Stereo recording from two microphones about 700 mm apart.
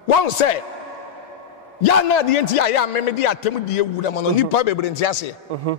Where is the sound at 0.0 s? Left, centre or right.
Left.